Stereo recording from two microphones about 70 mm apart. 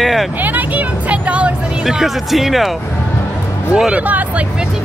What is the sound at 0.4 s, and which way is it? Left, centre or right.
Music, right.